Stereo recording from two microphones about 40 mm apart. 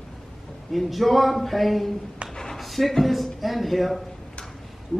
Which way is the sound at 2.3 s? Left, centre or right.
Centre.